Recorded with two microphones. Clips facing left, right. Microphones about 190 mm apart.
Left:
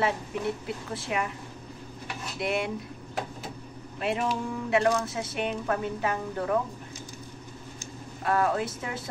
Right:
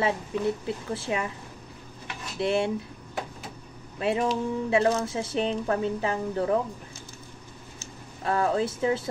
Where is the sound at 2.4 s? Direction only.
30° right (ahead or behind).